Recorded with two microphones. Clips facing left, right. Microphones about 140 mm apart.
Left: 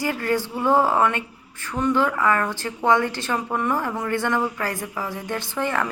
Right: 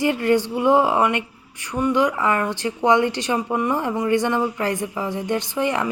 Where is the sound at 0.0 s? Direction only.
20° right (ahead or behind).